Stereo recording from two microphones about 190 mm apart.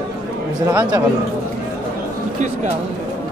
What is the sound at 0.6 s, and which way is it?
Speech, 15° right (ahead or behind).